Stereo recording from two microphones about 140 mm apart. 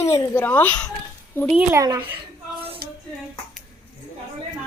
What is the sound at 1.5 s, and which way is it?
Speech, 10° right (ahead or behind).